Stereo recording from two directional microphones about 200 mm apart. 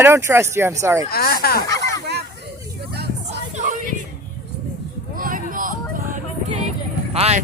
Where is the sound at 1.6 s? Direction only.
15° left (ahead or behind).